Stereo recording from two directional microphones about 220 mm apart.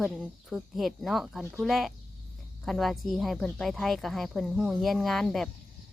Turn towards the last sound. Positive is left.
turn(degrees=0)  # may be behind; listen again after turning